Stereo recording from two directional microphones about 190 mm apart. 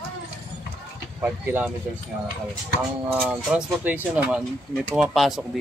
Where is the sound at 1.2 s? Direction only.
10° right (ahead or behind).